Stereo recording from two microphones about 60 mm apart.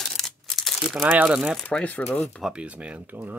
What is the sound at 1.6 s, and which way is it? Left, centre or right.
Speech, centre.